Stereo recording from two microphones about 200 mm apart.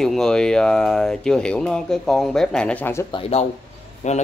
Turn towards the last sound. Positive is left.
turn(degrees=35)  # may be behind; listen again after turning